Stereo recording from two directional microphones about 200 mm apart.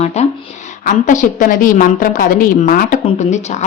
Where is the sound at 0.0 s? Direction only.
35° left (ahead or behind).